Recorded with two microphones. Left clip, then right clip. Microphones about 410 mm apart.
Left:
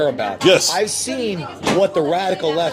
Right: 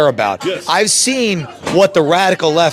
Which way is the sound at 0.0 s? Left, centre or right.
Right.